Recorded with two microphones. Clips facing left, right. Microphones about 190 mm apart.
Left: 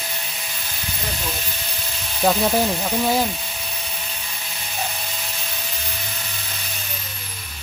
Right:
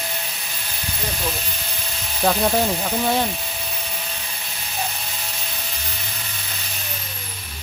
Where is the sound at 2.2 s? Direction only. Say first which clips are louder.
Left 1 dB; centre (ahead or behind).